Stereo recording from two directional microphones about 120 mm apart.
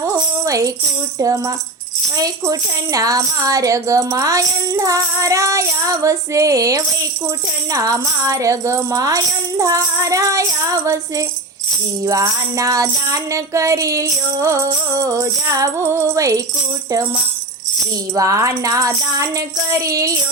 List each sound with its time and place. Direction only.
0.0 s jingle bell: 25° right (ahead or behind)
1.2 s speech: 30° right (ahead or behind)
18.1 s speech: 25° right (ahead or behind)